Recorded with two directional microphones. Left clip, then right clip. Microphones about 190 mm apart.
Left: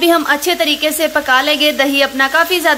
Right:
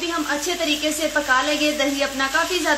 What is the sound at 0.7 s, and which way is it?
A woman's voice, 45° left (ahead or behind).